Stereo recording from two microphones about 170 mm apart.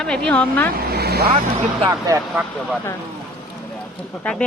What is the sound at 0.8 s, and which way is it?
Vehicle, 65° right (ahead or behind).